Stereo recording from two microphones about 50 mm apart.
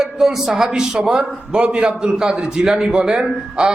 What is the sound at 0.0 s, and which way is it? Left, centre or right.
A man's voice, centre.